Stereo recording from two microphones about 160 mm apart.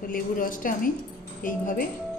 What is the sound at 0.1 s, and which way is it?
Speech, 60° left (ahead or behind).